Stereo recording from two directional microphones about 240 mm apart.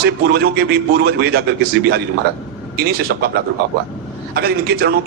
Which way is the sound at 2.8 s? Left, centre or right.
Right.